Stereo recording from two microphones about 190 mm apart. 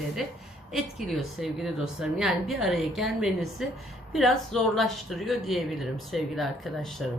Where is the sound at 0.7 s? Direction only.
Centre (ahead or behind).